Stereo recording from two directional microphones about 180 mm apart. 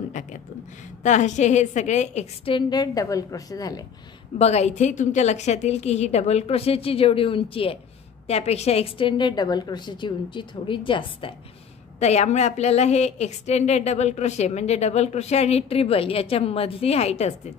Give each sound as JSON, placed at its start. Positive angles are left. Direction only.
{"t": 0.1, "sound": "a sound", "side_deg": 45}
{"t": 1.0, "sound": "a woman's voice", "side_deg": 40}
{"t": 4.4, "sound": "a woman's voice", "side_deg": 35}